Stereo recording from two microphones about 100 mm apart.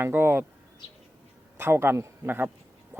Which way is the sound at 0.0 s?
20° right (ahead or behind).